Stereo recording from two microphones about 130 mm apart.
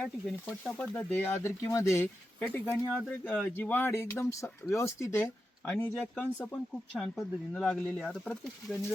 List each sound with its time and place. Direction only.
0.0 s speech: 10° left (ahead or behind)